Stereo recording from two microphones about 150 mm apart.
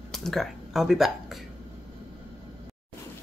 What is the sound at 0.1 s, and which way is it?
Speech, centre (ahead or behind).